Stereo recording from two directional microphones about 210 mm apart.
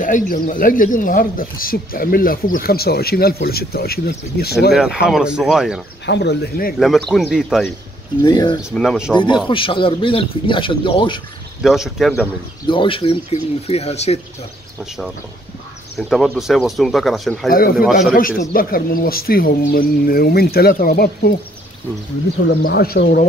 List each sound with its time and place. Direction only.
0.0 s speech: 40° left (ahead or behind)
5.0 s speech: 5° right (ahead or behind)
6.0 s speech: 55° left (ahead or behind)
7.1 s speech: centre (ahead or behind)
8.2 s speech: 20° left (ahead or behind)
8.6 s speech: centre (ahead or behind)
9.1 s speech: 20° left (ahead or behind)
11.6 s speech: centre (ahead or behind)
12.6 s speech: 25° left (ahead or behind)
16.0 s speech: centre (ahead or behind)
17.5 s speech: 45° left (ahead or behind)
22.6 s speech: 45° left (ahead or behind)